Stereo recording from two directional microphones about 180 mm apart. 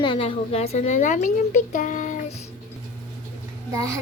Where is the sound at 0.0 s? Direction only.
30° left (ahead or behind); by 2.4 s 45° left (ahead or behind).